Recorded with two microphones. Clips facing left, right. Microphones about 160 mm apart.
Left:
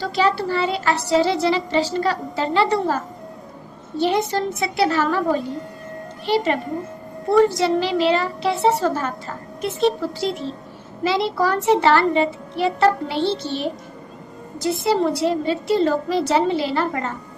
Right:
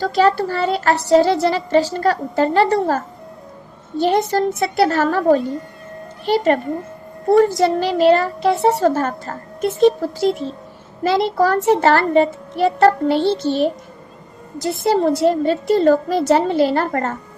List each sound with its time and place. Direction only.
0.0 s a woman's voice: 45° right (ahead or behind)
14.8 s a woman's voice: 50° right (ahead or behind)